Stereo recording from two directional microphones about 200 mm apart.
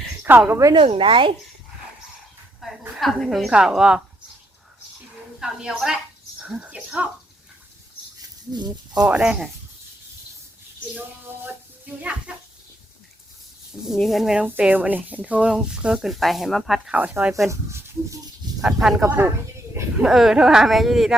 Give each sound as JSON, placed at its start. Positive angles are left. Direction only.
{"t": 0.2, "sound": "speech", "side_deg": -10}
{"t": 2.6, "sound": "speech", "side_deg": 0}
{"t": 5.4, "sound": "speech", "side_deg": -5}
{"t": 8.5, "sound": "speech", "side_deg": -20}
{"t": 9.0, "sound": "speech", "side_deg": -5}
{"t": 12.3, "sound": "a sound", "side_deg": -5}
{"t": 13.8, "sound": "speech", "side_deg": 0}
{"t": 18.6, "sound": "speech", "side_deg": 0}
{"t": 20.1, "sound": "speech", "side_deg": 0}